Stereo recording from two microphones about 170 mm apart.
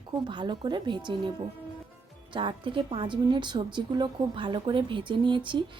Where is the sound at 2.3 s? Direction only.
30° right (ahead or behind).